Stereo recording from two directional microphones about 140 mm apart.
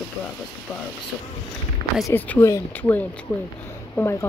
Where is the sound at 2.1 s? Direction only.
15° left (ahead or behind).